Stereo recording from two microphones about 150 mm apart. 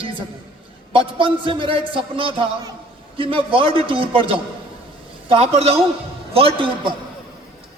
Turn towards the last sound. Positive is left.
turn(degrees=-35)  # may be behind; listen again after turning